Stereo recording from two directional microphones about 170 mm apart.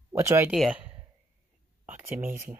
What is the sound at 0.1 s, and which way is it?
Speech, 15° right (ahead or behind).